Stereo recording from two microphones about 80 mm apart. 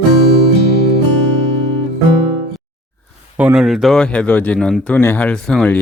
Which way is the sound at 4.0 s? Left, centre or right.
Centre.